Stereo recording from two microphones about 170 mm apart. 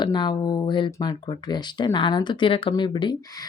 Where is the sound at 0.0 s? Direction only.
25° left (ahead or behind).